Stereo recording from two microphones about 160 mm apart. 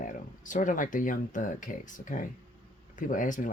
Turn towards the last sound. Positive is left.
turn(degrees=55)  # may be behind; listen again after turning